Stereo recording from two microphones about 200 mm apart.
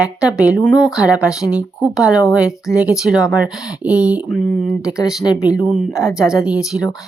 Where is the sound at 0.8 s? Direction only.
Centre (ahead or behind).